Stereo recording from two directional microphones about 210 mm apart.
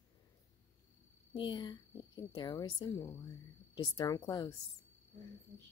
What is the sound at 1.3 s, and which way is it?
A child's voice, 20° left (ahead or behind).